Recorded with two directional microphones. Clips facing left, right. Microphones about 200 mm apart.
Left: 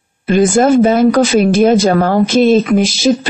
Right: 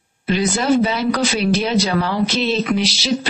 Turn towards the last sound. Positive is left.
turn(degrees=50)  # may be behind; listen again after turning